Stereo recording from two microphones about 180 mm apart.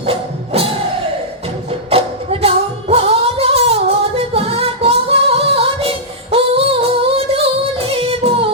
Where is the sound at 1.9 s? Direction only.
30° right (ahead or behind).